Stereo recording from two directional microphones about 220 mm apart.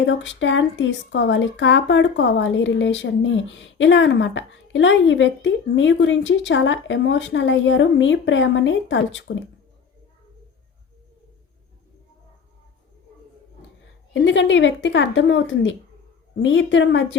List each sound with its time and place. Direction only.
0.0 s speech: 60° left (ahead or behind)
14.1 s speech: 55° left (ahead or behind)